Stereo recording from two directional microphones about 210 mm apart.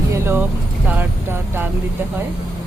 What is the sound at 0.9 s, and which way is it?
Vehicle, 10° right (ahead or behind).